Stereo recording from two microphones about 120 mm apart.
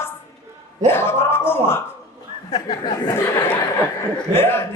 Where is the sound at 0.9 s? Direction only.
20° left (ahead or behind).